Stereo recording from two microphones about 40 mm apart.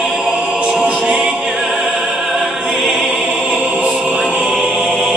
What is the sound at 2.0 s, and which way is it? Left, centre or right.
Opera, centre.